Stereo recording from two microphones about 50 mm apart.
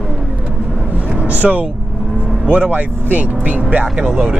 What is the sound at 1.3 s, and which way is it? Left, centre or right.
Vehicle, right.